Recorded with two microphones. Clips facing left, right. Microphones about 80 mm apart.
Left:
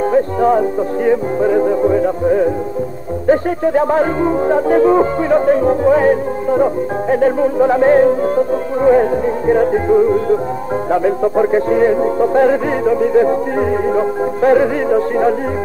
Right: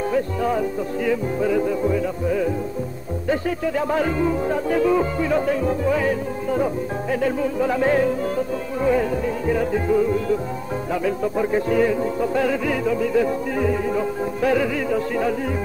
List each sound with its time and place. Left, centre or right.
0.1 s music: left